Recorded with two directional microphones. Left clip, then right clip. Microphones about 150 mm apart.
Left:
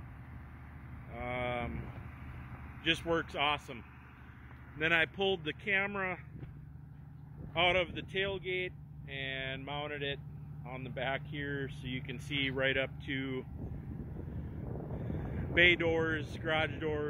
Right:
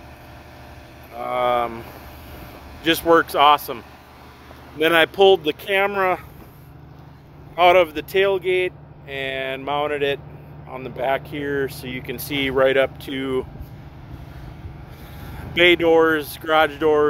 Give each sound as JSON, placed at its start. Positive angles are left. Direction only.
{"t": 1.3, "sound": "vehicle", "side_deg": -15}
{"t": 2.8, "sound": "speech", "side_deg": -10}
{"t": 7.5, "sound": "speech", "side_deg": -15}
{"t": 15.5, "sound": "speech", "side_deg": -10}